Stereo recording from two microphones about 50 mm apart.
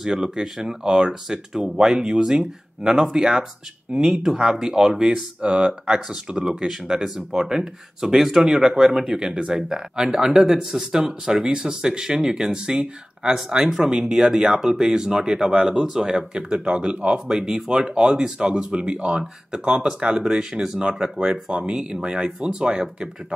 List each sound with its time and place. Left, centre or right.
0.0 s speech: centre